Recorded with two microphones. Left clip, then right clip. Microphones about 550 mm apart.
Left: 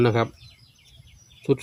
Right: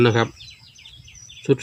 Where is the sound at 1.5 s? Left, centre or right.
Left.